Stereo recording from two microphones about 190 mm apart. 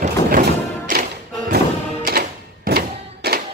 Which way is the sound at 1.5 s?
50° right (ahead or behind).